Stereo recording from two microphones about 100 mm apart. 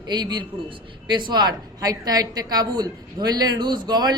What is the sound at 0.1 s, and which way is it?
A woman's voice, 50° right (ahead or behind).